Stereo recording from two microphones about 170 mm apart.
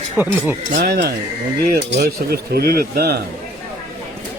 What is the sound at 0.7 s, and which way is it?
Cutlery, 80° right.